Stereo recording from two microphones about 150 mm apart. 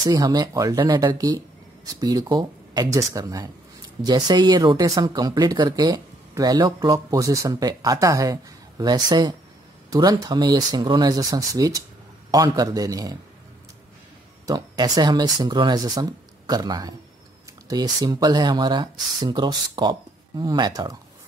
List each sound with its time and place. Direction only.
0.0 s speech: 25° right (ahead or behind)
14.4 s speech: 25° right (ahead or behind)